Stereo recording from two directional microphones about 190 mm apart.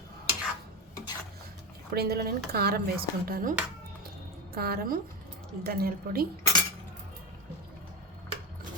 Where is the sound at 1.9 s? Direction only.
55° right (ahead or behind).